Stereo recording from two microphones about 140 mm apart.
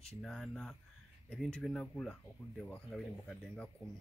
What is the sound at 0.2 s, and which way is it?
Speech, 5° left (ahead or behind).